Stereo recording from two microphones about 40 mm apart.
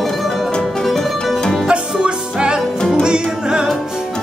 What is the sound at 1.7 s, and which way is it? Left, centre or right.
Music, right.